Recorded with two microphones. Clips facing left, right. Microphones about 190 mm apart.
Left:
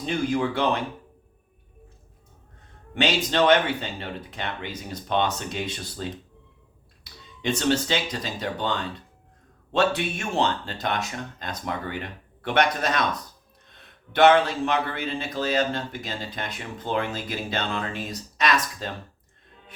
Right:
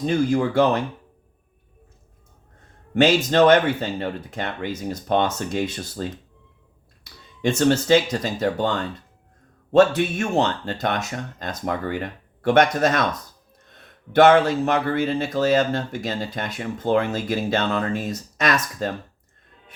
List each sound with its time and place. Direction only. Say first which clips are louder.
0.0 s speech: right 5 dB; 45° right (ahead or behind)
2.9 s speech: right 7 dB; 45° right (ahead or behind)